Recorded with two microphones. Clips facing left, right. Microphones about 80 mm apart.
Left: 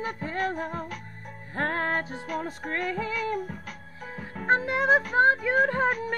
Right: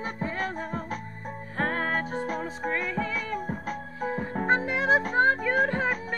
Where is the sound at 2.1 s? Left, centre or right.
Right.